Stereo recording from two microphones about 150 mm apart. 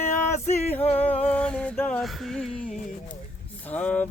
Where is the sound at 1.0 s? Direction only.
10° left (ahead or behind).